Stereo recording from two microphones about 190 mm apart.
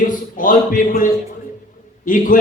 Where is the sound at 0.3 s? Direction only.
45° left (ahead or behind).